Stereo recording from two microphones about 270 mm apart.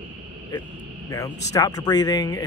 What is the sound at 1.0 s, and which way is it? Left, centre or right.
A man's voice, centre.